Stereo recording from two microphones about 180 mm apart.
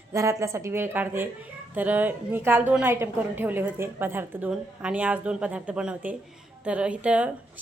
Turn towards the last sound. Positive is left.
turn(degrees=-5)  # may be behind; listen again after turning